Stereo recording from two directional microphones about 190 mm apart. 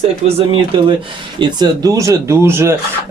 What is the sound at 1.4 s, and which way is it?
Speech, 20° right (ahead or behind).